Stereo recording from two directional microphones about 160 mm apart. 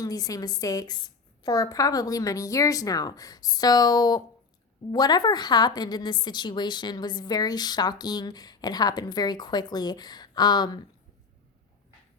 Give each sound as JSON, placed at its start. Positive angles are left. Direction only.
{"t": 0.0, "sound": "a woman's voice", "side_deg": 20}